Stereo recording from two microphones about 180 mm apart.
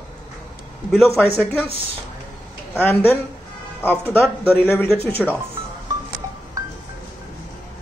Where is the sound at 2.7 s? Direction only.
10° left (ahead or behind).